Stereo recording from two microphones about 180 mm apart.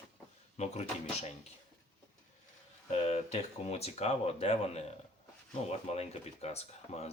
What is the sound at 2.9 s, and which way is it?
Speech, 35° left (ahead or behind).